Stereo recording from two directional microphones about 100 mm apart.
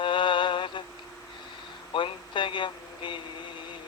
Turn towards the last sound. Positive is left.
turn(degrees=55)  # may be behind; listen again after turning